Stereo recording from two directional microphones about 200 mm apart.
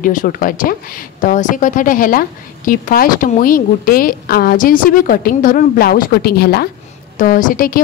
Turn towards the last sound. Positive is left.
turn(degrees=45)  # may be behind; listen again after turning